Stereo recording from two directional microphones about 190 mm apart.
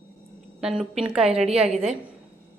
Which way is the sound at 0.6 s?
5° right (ahead or behind).